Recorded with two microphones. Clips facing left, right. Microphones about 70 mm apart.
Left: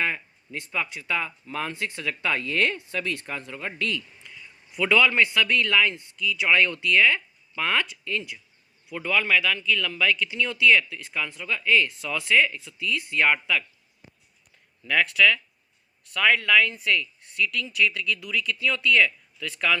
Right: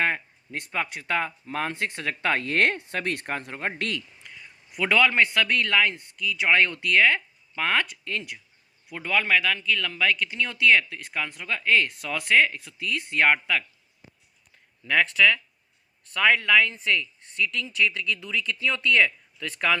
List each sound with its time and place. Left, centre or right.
0.0 s speech: right
4.7 s speech: right
9.0 s speech: right
14.8 s speech: right